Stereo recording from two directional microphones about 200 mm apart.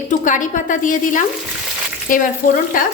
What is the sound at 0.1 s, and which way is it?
A woman's voice, 40° left (ahead or behind).